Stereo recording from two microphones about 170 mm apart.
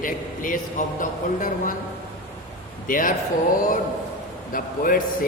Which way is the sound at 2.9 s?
55° left (ahead or behind).